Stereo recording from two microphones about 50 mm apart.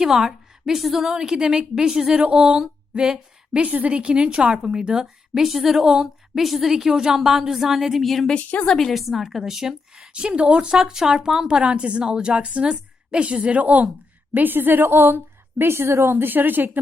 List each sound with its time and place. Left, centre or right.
0.0 s a woman's voice: centre
3.7 s a woman's voice: right; by 8.3 s centre
8.3 s a woman's voice: left
8.6 s a woman's voice: centre
8.9 s a woman's voice: centre
10.1 s a woman's voice: right